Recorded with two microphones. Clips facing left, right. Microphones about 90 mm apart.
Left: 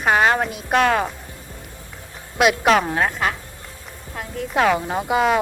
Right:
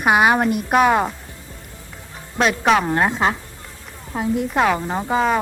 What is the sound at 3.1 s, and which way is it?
Speech, 25° right (ahead or behind).